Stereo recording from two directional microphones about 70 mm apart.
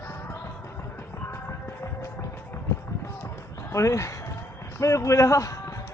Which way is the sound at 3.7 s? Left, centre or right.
Left.